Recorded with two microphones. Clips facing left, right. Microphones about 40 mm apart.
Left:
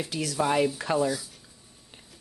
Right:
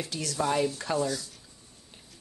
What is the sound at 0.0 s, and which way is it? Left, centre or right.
Speech, centre.